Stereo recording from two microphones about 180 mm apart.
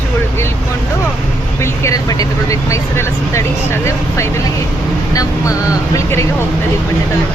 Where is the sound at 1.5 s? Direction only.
15° left (ahead or behind).